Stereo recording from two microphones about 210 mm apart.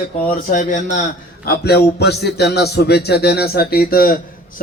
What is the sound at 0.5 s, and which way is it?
Speech, 35° left (ahead or behind).